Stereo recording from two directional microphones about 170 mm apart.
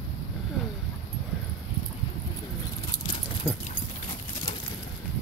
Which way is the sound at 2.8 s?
25° left (ahead or behind).